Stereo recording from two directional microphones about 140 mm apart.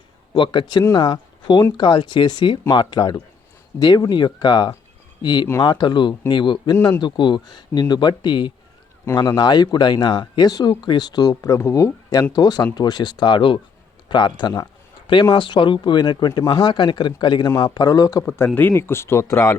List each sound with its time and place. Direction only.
0.3 s speech: 35° left (ahead or behind)